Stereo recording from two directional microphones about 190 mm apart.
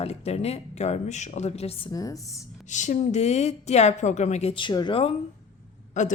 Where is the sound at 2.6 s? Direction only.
40° left (ahead or behind).